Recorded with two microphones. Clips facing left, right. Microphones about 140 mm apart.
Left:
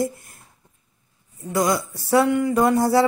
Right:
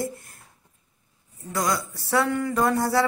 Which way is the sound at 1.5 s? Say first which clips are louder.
Left 5 dB; 20° left (ahead or behind).